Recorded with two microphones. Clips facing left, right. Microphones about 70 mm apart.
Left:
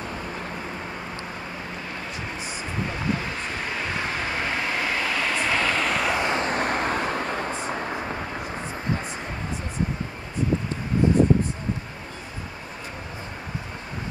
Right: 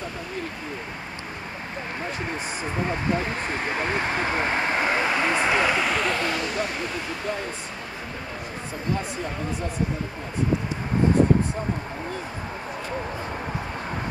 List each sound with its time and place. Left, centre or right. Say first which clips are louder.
3.7 s vehicle: right 4 dB; right; by 5.9 s centre
5.9 s a sound: even; centre
6.1 s vehicle: left 2 dB; left
6.4 s vehicle: left 4 dB; left